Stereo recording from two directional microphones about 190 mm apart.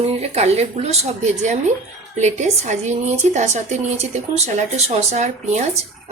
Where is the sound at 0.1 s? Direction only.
35° right (ahead or behind).